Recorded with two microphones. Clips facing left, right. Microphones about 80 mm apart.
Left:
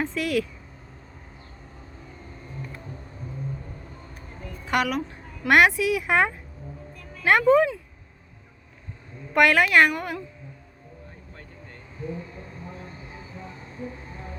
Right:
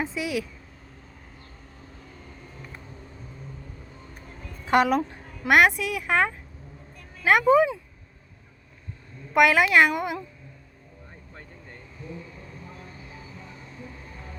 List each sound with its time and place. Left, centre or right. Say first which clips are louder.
0.0 s speech: left 3 dB; centre
4.6 s a woman's voice: right 4 dB; right
5.5 s speech: left 1 dB; centre
7.3 s a woman's voice: even; centre
9.3 s a woman's voice: even; centre
9.9 s a woman's voice: right 2 dB; centre
12.0 s a sound: left 6 dB; left